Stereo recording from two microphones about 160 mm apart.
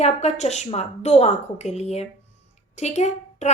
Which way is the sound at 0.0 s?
45° left (ahead or behind).